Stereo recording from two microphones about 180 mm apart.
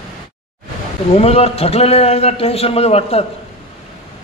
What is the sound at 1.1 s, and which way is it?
A man's voice, 35° left (ahead or behind).